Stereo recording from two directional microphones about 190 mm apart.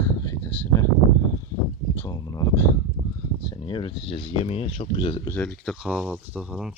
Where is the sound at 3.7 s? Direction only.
25° left (ahead or behind).